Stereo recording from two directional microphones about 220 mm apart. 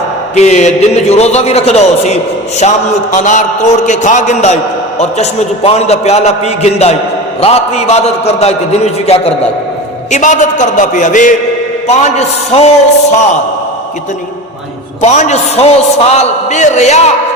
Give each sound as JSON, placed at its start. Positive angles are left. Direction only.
{"t": 0.3, "sound": "a man's voice", "side_deg": 30}
{"t": 15.0, "sound": "a man's voice", "side_deg": 30}